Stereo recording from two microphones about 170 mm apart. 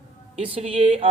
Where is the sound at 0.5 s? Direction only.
35° right (ahead or behind).